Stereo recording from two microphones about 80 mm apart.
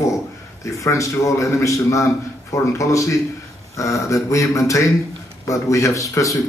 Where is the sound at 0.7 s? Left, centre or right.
Left.